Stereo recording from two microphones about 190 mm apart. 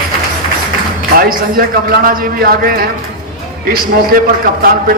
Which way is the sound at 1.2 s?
50° right (ahead or behind).